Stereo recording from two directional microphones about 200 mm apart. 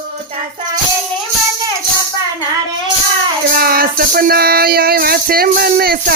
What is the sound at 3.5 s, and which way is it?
Music, 50° right (ahead or behind).